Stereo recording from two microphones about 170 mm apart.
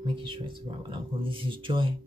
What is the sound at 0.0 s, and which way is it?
Speech, 30° right (ahead or behind).